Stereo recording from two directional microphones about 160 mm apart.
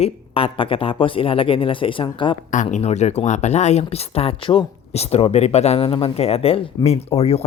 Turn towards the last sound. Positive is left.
turn(degrees=40)  # may be behind; listen again after turning